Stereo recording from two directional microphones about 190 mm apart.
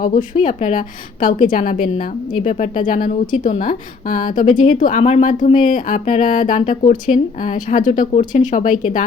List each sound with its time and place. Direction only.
0.0 s a woman's voice: 45° left (ahead or behind)